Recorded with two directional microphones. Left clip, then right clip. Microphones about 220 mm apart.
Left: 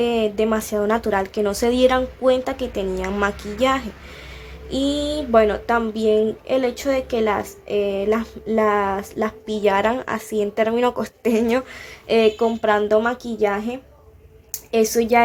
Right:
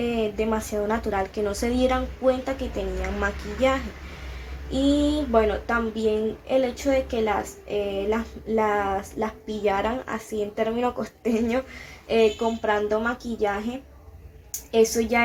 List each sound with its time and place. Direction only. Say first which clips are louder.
0.0 s speech: left 6 dB; 50° left (ahead or behind)